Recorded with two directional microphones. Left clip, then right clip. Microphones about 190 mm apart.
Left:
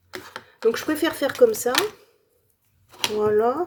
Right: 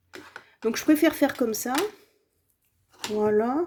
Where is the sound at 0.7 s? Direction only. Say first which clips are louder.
Even; 40° right (ahead or behind).